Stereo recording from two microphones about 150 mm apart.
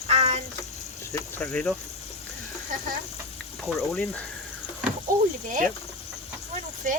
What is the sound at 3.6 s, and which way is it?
Speech, 5° left (ahead or behind).